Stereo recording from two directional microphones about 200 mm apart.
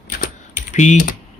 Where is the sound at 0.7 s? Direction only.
35° left (ahead or behind).